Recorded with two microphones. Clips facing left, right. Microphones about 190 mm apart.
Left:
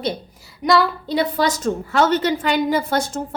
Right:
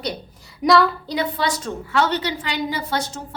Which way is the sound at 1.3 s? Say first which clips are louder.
Left 5 dB; 45° left (ahead or behind).